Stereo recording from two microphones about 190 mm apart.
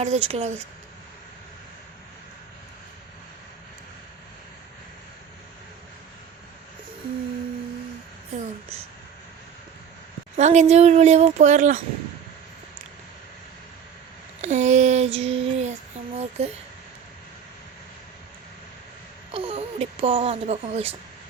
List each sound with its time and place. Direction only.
0.0 s speech: 35° right (ahead or behind)
10.3 s speech: 35° right (ahead or behind)
14.4 s child singing: 40° right (ahead or behind)
16.4 s speech: 35° right (ahead or behind)
19.3 s speech: 30° right (ahead or behind)